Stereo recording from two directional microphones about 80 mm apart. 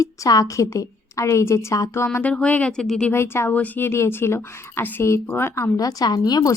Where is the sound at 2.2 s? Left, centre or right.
Centre.